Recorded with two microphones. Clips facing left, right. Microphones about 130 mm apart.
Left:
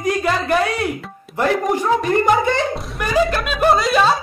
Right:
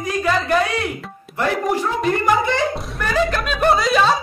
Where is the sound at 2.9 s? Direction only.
10° left (ahead or behind).